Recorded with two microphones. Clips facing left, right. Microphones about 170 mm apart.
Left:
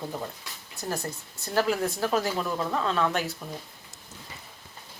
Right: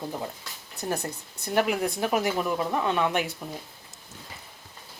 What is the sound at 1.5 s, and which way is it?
Speech, 15° right (ahead or behind).